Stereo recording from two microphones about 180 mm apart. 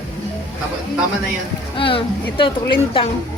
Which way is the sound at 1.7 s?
30° left (ahead or behind).